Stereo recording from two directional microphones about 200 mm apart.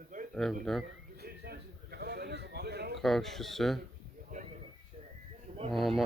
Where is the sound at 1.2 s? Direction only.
50° right (ahead or behind).